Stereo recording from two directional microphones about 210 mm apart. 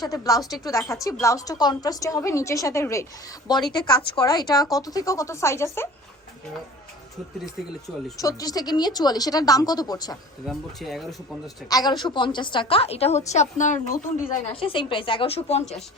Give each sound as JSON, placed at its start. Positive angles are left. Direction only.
{"t": 0.0, "sound": "a woman's voice", "side_deg": 15}
{"t": 8.2, "sound": "a woman's voice", "side_deg": 15}
{"t": 10.4, "sound": "speech", "side_deg": 0}
{"t": 11.7, "sound": "a woman's voice", "side_deg": 20}